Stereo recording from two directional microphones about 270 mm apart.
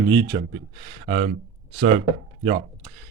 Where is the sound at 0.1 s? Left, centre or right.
Centre.